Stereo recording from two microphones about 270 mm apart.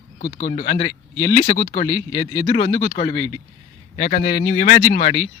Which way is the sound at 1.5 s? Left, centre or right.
Left.